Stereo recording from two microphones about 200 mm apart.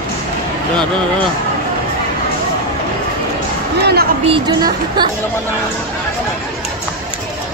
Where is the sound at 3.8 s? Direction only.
50° right (ahead or behind).